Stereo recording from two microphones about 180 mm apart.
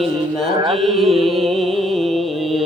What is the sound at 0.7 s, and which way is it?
Music, centre (ahead or behind).